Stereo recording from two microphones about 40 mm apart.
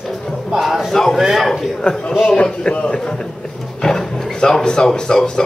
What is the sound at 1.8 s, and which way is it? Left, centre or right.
A man's voice, left.